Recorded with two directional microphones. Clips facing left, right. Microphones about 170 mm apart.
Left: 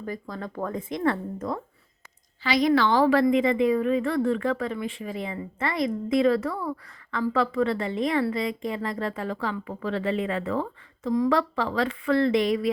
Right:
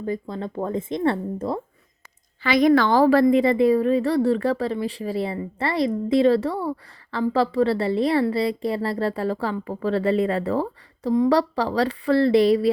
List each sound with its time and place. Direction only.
0.0 s speech: 25° right (ahead or behind)
2.4 s a woman's voice: 55° right (ahead or behind); by 12.7 s 35° right (ahead or behind)